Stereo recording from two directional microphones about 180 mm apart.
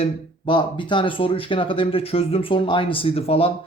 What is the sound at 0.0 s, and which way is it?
Speech, 25° left (ahead or behind).